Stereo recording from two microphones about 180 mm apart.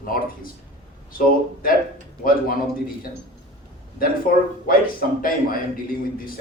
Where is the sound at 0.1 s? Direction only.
50° left (ahead or behind).